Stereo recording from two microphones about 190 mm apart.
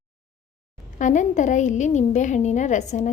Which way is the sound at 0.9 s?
40° left (ahead or behind).